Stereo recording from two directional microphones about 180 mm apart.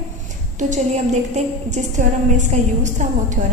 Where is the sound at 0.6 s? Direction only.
40° right (ahead or behind).